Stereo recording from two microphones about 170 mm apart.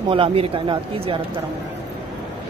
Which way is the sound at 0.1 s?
30° right (ahead or behind).